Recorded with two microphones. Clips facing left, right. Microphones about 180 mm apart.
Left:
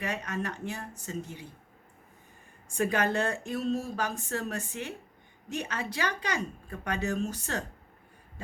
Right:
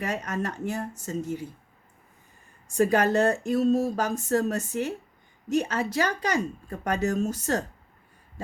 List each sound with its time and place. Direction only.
0.0 s speech: 40° right (ahead or behind)
2.6 s speech: 40° right (ahead or behind)